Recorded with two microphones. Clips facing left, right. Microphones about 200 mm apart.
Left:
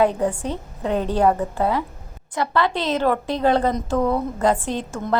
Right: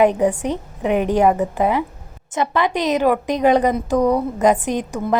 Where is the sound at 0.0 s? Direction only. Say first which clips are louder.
Right 4 dB; 20° right (ahead or behind).